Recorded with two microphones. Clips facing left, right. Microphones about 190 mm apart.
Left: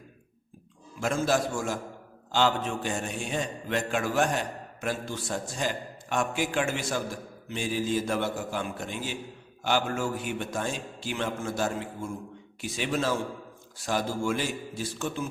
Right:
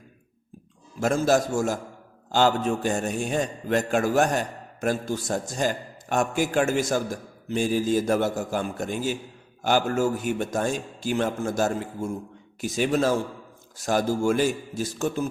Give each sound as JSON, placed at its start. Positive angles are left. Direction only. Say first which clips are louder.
{"t": 0.9, "sound": "a man's voice", "louder": "right 5 dB", "side_deg": -40}